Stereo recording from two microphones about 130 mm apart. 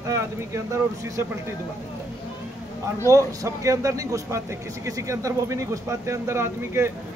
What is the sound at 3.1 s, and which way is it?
Speech, 25° right (ahead or behind).